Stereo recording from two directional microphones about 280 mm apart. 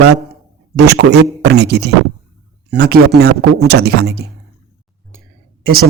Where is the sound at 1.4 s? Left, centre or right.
Right.